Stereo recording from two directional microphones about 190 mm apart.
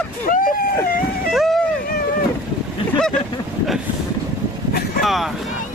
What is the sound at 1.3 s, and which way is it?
Vehicle, centre (ahead or behind).